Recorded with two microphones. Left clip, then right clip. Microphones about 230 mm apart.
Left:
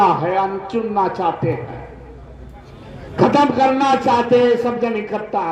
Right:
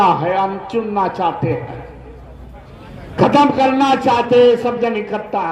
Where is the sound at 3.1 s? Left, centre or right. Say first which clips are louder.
Right 2 dB; right.